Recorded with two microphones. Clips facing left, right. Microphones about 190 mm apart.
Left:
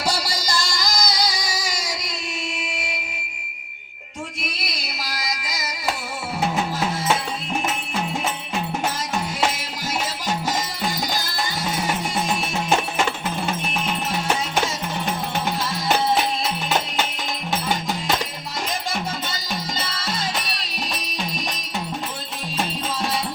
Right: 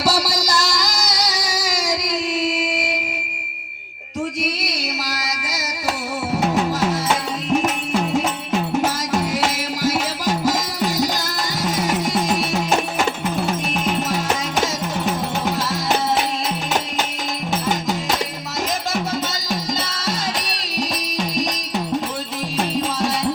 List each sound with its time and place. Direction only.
0.0 s music: 80° right
4.4 s music: 70° right (ahead or behind)
9.8 s music: 90° right